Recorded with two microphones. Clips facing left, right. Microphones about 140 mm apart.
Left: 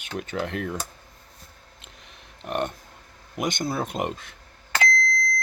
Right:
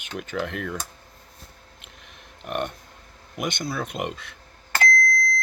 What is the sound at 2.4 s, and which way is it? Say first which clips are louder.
Speech: left 1 dB; 35° left (ahead or behind).